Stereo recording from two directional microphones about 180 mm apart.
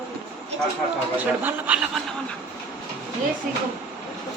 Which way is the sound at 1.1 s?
10° right (ahead or behind).